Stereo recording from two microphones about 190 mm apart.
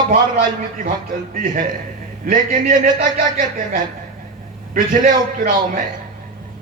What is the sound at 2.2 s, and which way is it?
Speech, 45° right (ahead or behind).